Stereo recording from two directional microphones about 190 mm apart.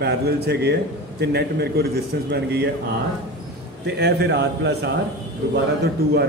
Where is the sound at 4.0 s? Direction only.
60° right (ahead or behind).